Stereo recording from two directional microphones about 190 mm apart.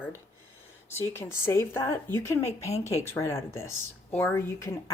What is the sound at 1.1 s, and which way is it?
Speech, 10° left (ahead or behind).